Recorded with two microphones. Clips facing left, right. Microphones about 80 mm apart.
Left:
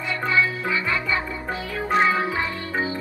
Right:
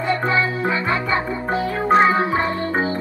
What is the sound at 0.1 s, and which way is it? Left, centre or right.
Music, right.